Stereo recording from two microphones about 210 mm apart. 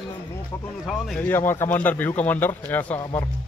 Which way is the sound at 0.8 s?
5° left (ahead or behind).